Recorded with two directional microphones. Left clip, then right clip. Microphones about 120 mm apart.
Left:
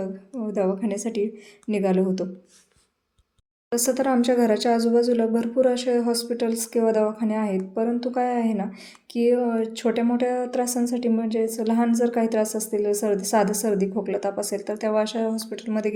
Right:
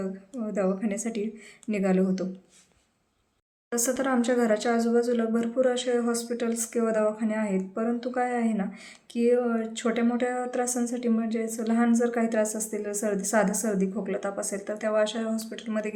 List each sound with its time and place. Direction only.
0.5 s a woman's voice: 15° left (ahead or behind)
3.7 s speech: 20° left (ahead or behind)